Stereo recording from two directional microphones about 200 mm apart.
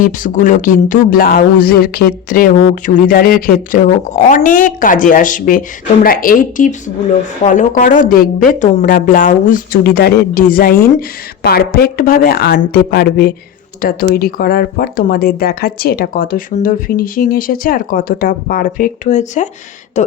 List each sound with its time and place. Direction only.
0.0 s speech: 40° left (ahead or behind)